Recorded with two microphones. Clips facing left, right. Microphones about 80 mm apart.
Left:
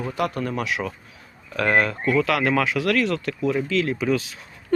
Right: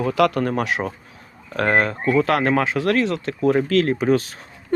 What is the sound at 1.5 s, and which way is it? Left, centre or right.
Speech, right.